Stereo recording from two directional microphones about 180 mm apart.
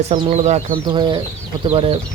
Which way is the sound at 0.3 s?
40° right (ahead or behind).